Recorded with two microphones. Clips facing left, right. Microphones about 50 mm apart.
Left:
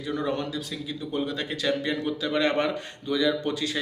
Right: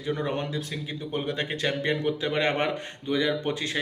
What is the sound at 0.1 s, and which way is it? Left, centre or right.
Speech, right.